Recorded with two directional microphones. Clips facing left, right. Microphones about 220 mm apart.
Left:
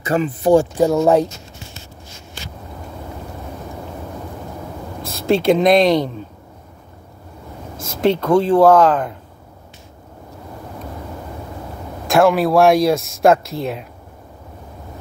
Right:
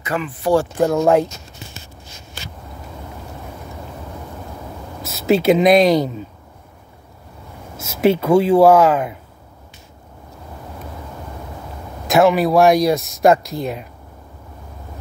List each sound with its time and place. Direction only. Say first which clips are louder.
0.0 s speech: left 5 dB; 35° left (ahead or behind)
0.4 s speech: left 2 dB; 20° left (ahead or behind)
5.0 s speech: right 1 dB; 5° right (ahead or behind)
7.8 s speech: right 1 dB; 5° right (ahead or behind)
12.1 s speech: even; centre (ahead or behind)